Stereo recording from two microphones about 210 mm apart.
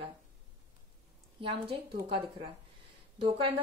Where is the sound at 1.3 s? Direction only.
25° right (ahead or behind).